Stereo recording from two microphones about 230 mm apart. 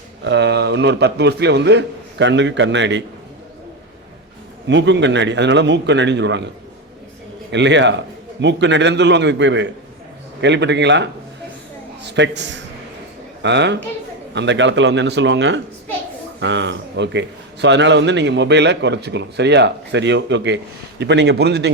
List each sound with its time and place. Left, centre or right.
0.3 s a man's voice: right
4.7 s a man's voice: right
7.5 s a man's voice: right